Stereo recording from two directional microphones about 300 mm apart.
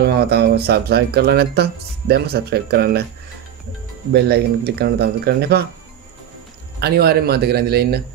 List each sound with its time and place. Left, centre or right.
0.0 s speech: right
4.1 s speech: right
6.8 s speech: right